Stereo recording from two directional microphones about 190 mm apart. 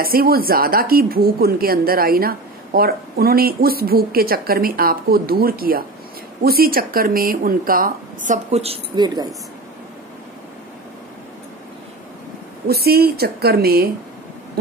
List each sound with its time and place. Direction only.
0.0 s a woman's voice: 50° right (ahead or behind); by 9.3 s 20° right (ahead or behind)
12.6 s a woman's voice: 55° right (ahead or behind)